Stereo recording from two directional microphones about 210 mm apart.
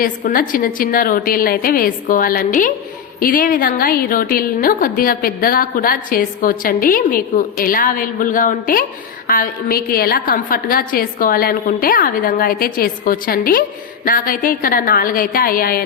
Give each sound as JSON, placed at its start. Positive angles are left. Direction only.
{"t": 0.0, "sound": "a woman's voice", "side_deg": 40}